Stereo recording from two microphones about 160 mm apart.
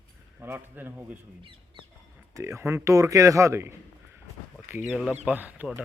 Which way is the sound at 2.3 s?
15° right (ahead or behind).